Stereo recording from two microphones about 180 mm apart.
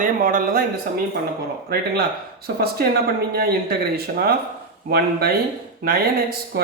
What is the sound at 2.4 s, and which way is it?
Speech, 60° right (ahead or behind).